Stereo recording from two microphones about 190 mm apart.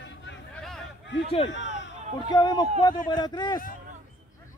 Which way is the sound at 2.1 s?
20° left (ahead or behind).